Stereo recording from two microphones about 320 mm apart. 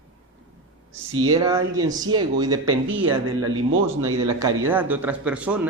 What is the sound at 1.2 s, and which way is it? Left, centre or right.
A man's voice, centre.